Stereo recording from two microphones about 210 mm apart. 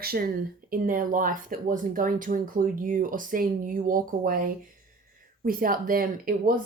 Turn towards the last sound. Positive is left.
turn(degrees=-45)  # may be behind; listen again after turning